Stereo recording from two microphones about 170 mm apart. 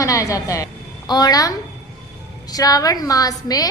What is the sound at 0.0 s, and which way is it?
A woman's voice, 20° left (ahead or behind).